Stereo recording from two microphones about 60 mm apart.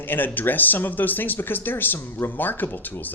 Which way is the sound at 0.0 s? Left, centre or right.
Left.